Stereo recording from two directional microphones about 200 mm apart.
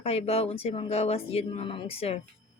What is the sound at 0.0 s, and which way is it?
Speech, 30° left (ahead or behind).